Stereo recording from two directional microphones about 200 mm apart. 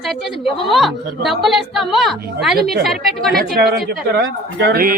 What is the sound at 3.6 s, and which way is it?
Speech, 50° right (ahead or behind).